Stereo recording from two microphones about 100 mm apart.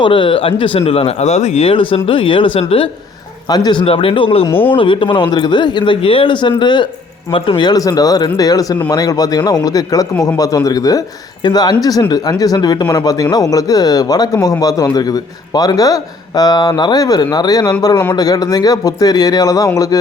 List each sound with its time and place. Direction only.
0.0 s speech: 60° left (ahead or behind)
3.5 s a man's voice: 45° left (ahead or behind)
3.8 s speech: 65° left (ahead or behind)
4.5 s speech: 20° left (ahead or behind)
4.8 s a man's voice: 60° left (ahead or behind); by 20.0 s 35° left (ahead or behind)